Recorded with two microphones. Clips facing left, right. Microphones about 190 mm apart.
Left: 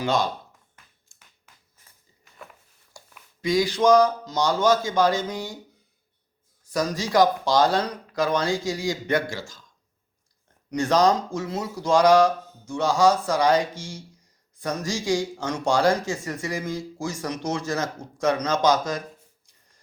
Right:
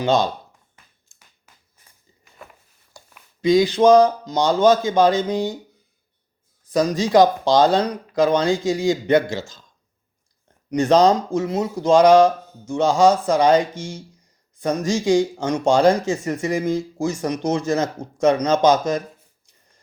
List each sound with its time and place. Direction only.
0.0 s speech: 25° right (ahead or behind)
1.1 s a sound: 25° right (ahead or behind)
3.4 s speech: 20° right (ahead or behind)
6.7 s speech: 20° right (ahead or behind)
10.7 s speech: 20° right (ahead or behind)